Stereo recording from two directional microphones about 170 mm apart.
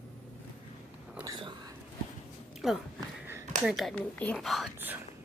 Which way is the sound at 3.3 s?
15° right (ahead or behind).